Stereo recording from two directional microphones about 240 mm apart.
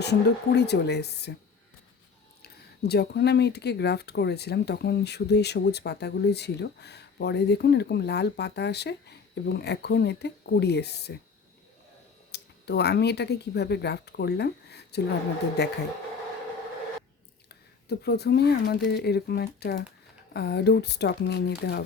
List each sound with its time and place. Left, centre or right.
0.0 s speech: left
2.4 s speech: left
12.3 s speech: left
17.5 s speech: left